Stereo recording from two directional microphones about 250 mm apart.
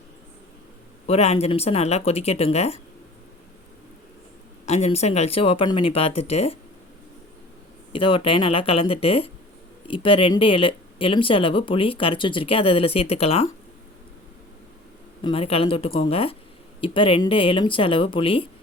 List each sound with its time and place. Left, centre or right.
1.0 s speech: left
4.6 s speech: left
7.9 s speech: centre
15.2 s speech: left